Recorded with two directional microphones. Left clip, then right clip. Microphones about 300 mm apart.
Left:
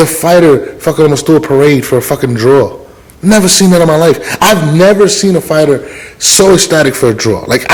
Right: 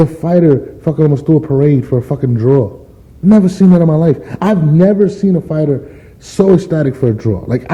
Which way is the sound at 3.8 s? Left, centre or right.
Left.